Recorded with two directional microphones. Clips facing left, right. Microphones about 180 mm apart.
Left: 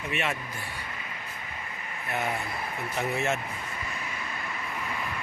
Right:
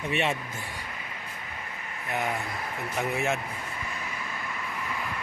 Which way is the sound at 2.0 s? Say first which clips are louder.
Right 1 dB; 15° right (ahead or behind).